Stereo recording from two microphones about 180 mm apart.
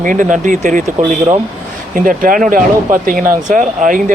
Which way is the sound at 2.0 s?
50° right (ahead or behind).